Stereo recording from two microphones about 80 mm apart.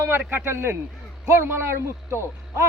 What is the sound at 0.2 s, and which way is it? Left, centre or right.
A man's voice, right.